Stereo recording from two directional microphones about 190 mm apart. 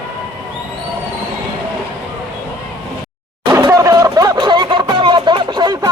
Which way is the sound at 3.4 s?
20° right (ahead or behind).